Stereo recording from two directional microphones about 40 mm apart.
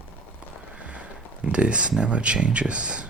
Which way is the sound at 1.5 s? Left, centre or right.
Right.